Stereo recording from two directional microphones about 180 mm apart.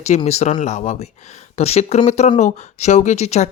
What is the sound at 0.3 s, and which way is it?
Speech, 35° left (ahead or behind).